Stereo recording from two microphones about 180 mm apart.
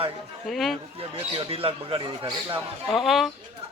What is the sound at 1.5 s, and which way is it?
Speech, 30° right (ahead or behind).